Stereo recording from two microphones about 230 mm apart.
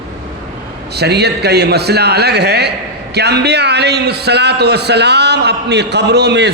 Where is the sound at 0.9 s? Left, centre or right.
Right.